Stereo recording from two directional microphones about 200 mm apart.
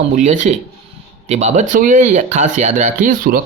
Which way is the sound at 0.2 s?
35° right (ahead or behind).